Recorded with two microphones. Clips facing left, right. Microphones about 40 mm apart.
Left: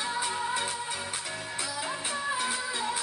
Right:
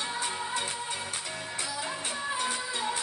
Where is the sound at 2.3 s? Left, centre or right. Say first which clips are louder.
Left 1 dB; centre.